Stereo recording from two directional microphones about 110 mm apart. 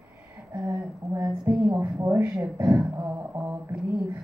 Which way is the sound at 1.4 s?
15° right (ahead or behind).